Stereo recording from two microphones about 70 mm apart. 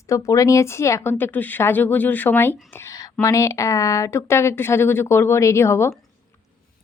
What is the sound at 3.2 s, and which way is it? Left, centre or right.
Speech, left.